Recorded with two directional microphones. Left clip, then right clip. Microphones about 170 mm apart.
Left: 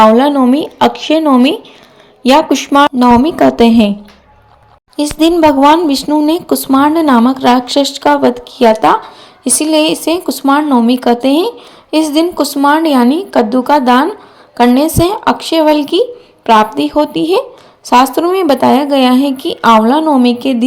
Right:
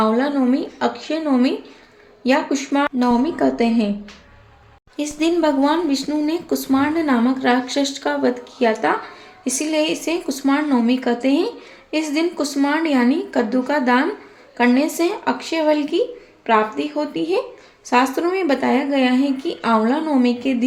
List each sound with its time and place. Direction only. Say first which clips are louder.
0.0 s a woman's voice: left 12 dB; 45° left (ahead or behind)
4.9 s speech: left 10 dB; 35° left (ahead or behind)